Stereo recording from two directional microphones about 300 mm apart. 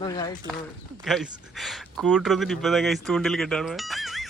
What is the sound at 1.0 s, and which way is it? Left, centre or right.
Speech, centre.